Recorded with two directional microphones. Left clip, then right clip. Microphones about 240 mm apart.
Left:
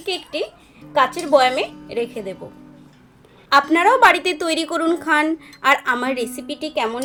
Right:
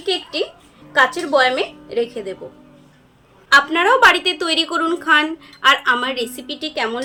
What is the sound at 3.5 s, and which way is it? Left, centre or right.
A woman's voice, left.